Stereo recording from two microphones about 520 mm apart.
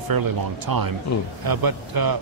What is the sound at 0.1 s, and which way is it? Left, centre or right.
Speech, right.